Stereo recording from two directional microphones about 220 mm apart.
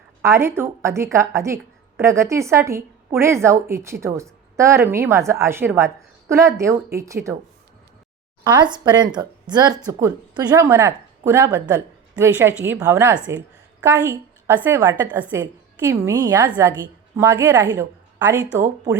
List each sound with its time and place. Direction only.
0.2 s a woman's voice: 10° right (ahead or behind)
8.5 s a woman's voice: 20° right (ahead or behind)